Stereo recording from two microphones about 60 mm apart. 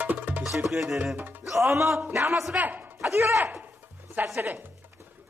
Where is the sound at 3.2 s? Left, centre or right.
Right.